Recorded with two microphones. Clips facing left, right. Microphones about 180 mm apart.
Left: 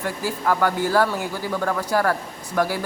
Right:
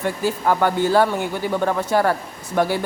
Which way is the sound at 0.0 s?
25° right (ahead or behind).